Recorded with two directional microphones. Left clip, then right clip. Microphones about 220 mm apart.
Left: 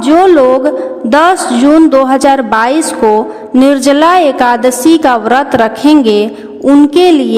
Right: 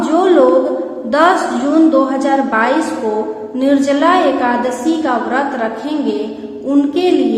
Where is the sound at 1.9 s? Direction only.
50° left (ahead or behind).